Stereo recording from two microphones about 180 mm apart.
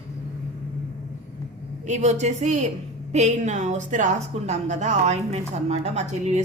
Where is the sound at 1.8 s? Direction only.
40° right (ahead or behind).